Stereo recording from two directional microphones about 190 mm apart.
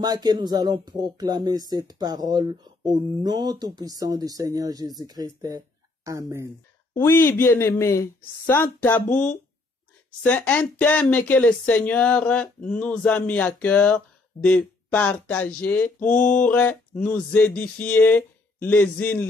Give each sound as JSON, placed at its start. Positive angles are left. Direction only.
{"t": 0.0, "sound": "speech", "side_deg": -20}
{"t": 6.9, "sound": "speech", "side_deg": 15}